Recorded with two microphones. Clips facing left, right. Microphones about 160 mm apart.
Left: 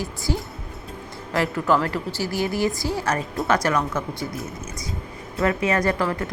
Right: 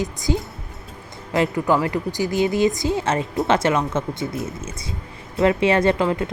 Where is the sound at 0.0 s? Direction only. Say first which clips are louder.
Right 4 dB; 20° right (ahead or behind).